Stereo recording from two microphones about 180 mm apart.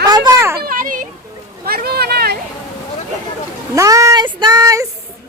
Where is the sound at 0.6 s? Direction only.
50° right (ahead or behind).